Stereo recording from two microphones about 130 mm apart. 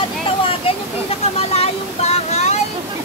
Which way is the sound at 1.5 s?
55° left (ahead or behind).